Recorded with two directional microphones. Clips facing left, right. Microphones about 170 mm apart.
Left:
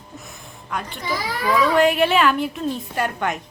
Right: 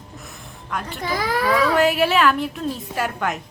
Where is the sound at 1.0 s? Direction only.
50° right (ahead or behind).